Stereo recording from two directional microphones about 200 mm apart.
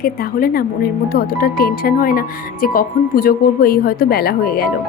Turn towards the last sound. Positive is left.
turn(degrees=50)  # may be behind; listen again after turning